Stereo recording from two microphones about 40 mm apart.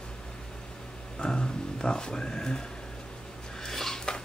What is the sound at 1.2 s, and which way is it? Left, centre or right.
Speech, centre.